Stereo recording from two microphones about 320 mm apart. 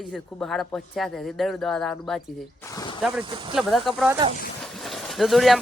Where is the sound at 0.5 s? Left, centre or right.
Centre.